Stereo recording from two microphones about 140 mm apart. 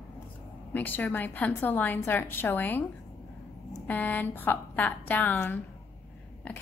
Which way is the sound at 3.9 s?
10° left (ahead or behind).